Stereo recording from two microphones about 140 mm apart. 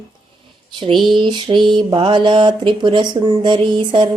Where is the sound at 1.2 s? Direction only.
35° right (ahead or behind).